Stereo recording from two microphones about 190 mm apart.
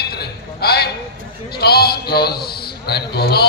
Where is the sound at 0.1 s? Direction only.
55° left (ahead or behind).